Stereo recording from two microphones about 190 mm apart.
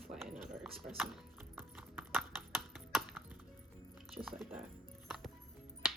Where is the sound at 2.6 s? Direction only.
Centre (ahead or behind).